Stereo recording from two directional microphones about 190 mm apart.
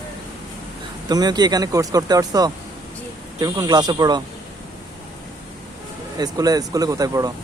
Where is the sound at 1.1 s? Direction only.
20° right (ahead or behind).